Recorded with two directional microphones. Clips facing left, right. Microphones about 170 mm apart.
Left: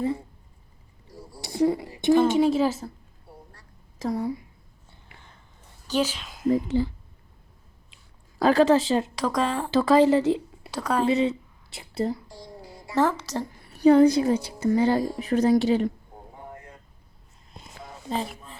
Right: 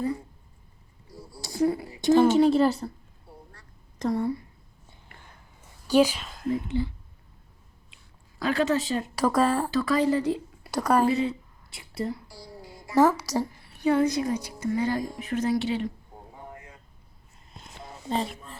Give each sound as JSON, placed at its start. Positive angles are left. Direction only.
{"t": 1.1, "sound": "a sound", "side_deg": 15}
{"t": 2.4, "sound": "a woman's voice", "side_deg": 0}
{"t": 3.9, "sound": "speech", "side_deg": 0}
{"t": 5.9, "sound": "speech", "side_deg": -10}
{"t": 6.2, "sound": "a sound", "side_deg": 0}
{"t": 6.7, "sound": "a woman's voice", "side_deg": 35}
{"t": 8.4, "sound": "a woman's voice", "side_deg": 35}
{"t": 9.1, "sound": "speech", "side_deg": -5}
{"t": 9.7, "sound": "speech", "side_deg": 25}
{"t": 10.7, "sound": "speech", "side_deg": -10}
{"t": 11.1, "sound": "speech", "side_deg": 20}
{"t": 13.0, "sound": "speech", "side_deg": -10}
{"t": 13.7, "sound": "a woman's voice", "side_deg": 35}
{"t": 17.5, "sound": "a sound", "side_deg": 0}